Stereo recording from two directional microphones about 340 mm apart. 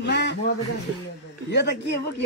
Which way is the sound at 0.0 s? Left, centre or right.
Left.